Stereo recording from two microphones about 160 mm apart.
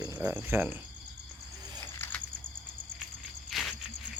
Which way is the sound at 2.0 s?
10° left (ahead or behind).